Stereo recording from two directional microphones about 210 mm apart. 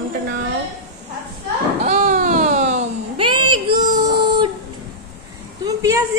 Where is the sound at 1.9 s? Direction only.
35° right (ahead or behind).